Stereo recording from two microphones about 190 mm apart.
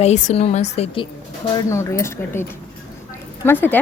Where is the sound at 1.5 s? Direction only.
15° left (ahead or behind).